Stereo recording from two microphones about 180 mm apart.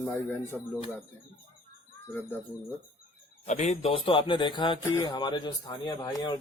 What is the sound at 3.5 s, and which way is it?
A man's voice, 40° left (ahead or behind).